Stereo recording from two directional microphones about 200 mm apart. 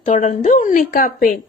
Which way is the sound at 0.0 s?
40° left (ahead or behind).